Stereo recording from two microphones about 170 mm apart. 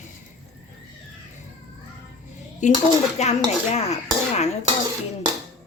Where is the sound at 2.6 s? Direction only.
45° left (ahead or behind).